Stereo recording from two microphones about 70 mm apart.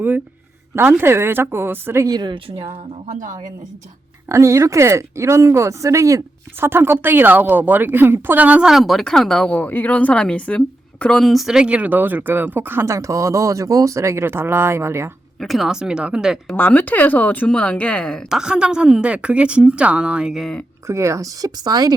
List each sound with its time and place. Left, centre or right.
0.8 s speech: right
2.0 s a woman's voice: right
4.3 s speech: right
6.6 s a woman's voice: right
8.6 s speech: centre
9.6 s speech: left
11.2 s a woman's voice: centre; by 12.8 s right
12.8 s speech: right
15.4 s a woman's voice: centre
16.6 s speech: left; by 18.3 s centre
18.3 s a woman's voice: centre
20.3 s speech: centre
20.8 s speech: right